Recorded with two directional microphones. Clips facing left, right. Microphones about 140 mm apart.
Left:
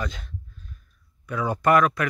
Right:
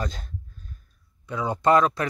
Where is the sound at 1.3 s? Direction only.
20° right (ahead or behind).